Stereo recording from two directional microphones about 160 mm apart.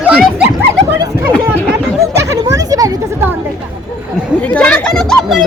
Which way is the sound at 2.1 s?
20° right (ahead or behind).